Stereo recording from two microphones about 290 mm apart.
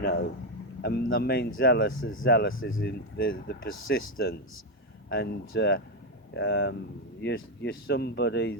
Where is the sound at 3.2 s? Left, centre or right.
Left.